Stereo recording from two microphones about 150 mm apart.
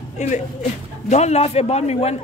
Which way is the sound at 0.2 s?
50° left (ahead or behind).